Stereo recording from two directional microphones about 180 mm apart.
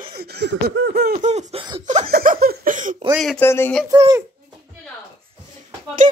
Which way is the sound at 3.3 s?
10° left (ahead or behind).